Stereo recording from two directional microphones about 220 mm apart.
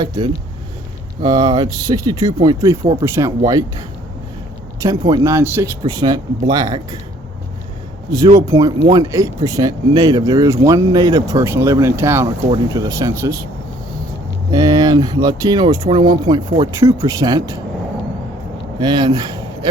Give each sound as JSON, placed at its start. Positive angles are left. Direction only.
{"t": 1.2, "sound": "speech", "side_deg": -15}
{"t": 8.4, "sound": "speech", "side_deg": -15}
{"t": 14.5, "sound": "speech", "side_deg": -15}
{"t": 18.8, "sound": "speech", "side_deg": -20}